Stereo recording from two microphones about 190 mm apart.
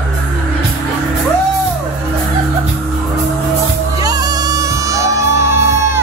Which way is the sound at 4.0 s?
20° right (ahead or behind).